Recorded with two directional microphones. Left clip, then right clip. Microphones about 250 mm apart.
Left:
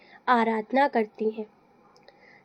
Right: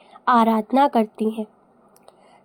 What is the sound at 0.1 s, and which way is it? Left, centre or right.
Speech, right.